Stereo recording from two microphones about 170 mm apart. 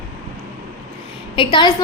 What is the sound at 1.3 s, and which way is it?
Speech, 30° left (ahead or behind).